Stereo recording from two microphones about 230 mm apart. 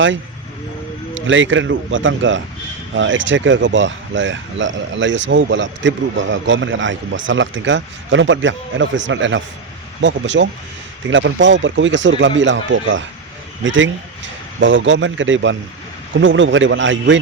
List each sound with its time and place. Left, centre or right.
1.3 s speech: right